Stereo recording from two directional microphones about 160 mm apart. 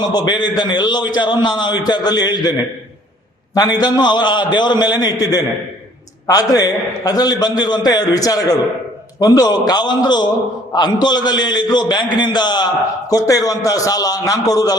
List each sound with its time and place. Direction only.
0.0 s a man's voice: 25° left (ahead or behind)